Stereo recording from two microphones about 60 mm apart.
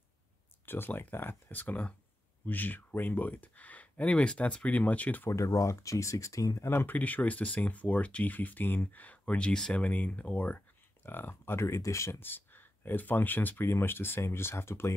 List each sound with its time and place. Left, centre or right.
0.7 s speech: left
5.3 s speech: left
6.6 s speech: left
6.9 s speech: left
9.8 s speech: left
11.1 s speech: left
12.2 s speech: left